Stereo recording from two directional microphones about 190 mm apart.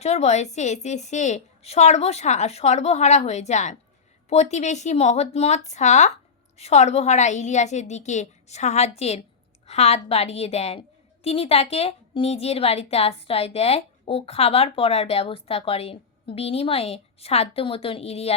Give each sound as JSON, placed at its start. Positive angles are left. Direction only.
{"t": 0.0, "sound": "a woman's voice", "side_deg": 35}